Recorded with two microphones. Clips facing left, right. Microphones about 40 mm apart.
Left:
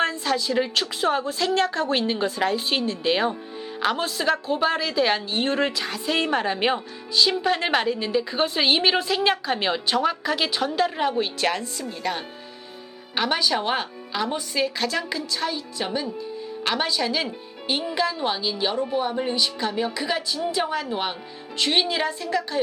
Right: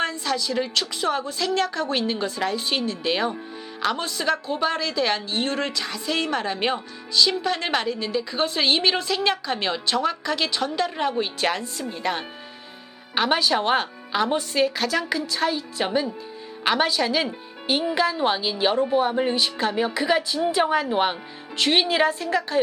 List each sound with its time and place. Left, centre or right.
0.0 s a woman's voice: centre
11.8 s a woman's voice: centre
13.7 s speech: right
14.8 s a woman's voice: centre